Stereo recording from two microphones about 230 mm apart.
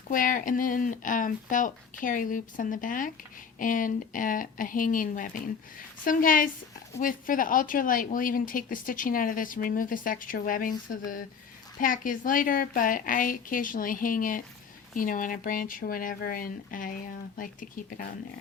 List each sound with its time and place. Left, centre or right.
0.1 s a woman's voice: left